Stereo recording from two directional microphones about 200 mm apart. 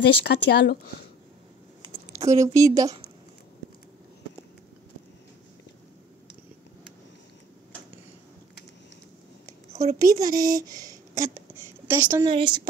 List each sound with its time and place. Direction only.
0.0 s speech: 60° left (ahead or behind)
2.1 s a woman's voice: 15° right (ahead or behind)
10.0 s a woman's voice: 20° right (ahead or behind)